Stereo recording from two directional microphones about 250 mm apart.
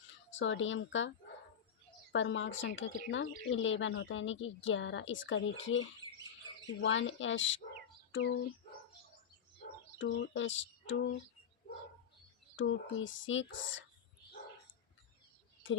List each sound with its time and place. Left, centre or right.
0.3 s speech: left
2.1 s speech: left
6.8 s speech: left
10.0 s speech: left
12.5 s speech: left
15.6 s speech: left